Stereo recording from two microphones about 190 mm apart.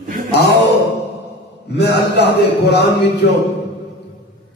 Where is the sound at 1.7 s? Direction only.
60° left (ahead or behind).